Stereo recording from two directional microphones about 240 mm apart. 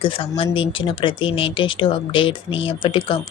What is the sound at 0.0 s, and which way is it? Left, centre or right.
Speech, left.